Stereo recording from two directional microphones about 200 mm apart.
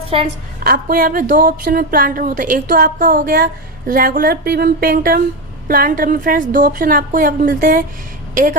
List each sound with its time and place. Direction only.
0.1 s a woman's voice: 30° right (ahead or behind)
0.6 s speech: 45° right (ahead or behind)